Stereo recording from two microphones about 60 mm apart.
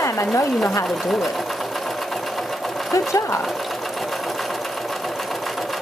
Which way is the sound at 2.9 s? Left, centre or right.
Left.